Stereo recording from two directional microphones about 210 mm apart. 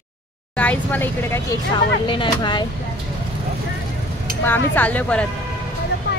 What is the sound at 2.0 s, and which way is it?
Speech, 25° left (ahead or behind).